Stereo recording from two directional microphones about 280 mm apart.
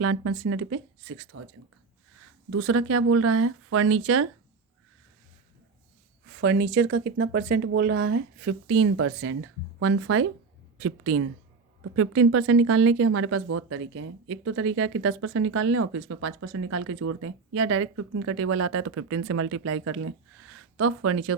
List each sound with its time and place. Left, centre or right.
0.0 s speech: right
2.5 s speech: right
6.4 s speech: right
8.6 s speech: right